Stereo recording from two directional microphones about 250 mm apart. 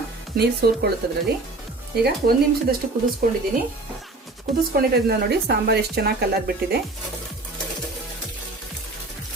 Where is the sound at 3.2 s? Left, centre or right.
Right.